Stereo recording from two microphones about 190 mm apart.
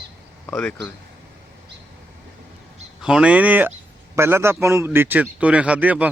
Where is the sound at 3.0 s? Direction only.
5° right (ahead or behind).